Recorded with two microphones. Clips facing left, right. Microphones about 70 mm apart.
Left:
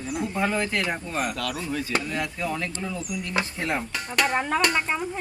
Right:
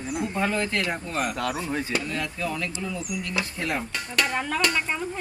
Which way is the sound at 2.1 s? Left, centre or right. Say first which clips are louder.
Left 1 dB; centre.